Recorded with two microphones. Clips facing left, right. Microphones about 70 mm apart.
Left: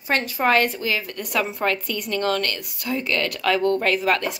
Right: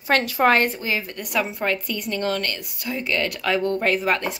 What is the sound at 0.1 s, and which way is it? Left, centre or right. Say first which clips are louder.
Speech: right 2 dB; right.